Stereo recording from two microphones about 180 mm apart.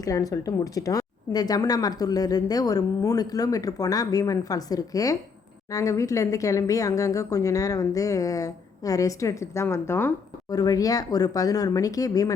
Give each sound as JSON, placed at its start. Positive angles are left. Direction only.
{"t": 0.0, "sound": "speech", "side_deg": 20}